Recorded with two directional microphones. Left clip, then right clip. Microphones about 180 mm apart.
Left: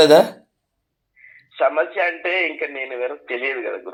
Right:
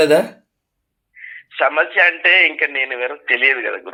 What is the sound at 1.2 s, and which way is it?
A man's voice, 20° right (ahead or behind).